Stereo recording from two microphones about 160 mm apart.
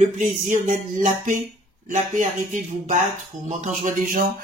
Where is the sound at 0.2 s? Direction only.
50° right (ahead or behind).